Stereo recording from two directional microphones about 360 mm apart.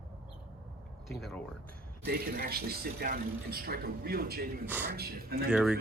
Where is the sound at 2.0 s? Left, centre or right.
Right.